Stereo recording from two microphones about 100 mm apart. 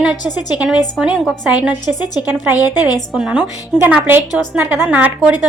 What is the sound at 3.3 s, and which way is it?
A woman's voice, 15° right (ahead or behind).